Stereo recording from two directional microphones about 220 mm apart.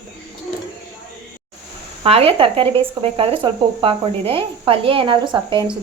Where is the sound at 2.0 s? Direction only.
25° right (ahead or behind).